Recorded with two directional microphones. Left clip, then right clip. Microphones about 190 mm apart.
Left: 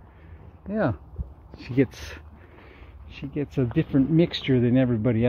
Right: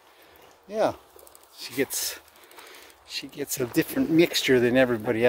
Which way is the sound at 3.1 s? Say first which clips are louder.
Even; 35° right (ahead or behind).